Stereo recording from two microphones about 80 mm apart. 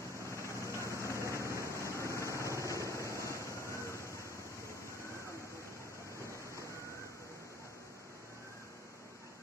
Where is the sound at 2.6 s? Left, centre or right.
Right.